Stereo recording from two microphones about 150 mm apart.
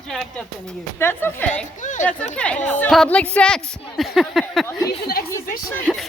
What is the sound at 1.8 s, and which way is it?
Speech, 55° left (ahead or behind).